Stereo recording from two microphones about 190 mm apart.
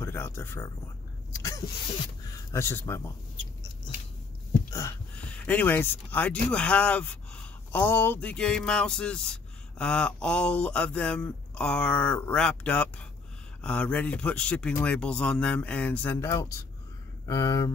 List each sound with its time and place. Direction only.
0.0 s speech: 10° left (ahead or behind)
2.2 s speech: 15° left (ahead or behind)
4.7 s a man's voice: 10° left (ahead or behind)